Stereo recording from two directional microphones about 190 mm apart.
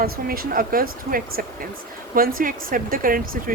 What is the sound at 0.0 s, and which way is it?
Speech, 50° right (ahead or behind).